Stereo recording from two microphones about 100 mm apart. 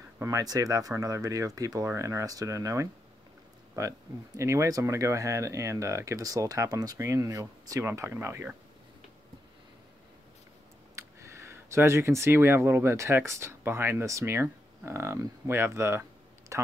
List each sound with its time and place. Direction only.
0.2 s speech: 35° right (ahead or behind)
4.4 s speech: 30° right (ahead or behind)
11.0 s speech: 30° right (ahead or behind)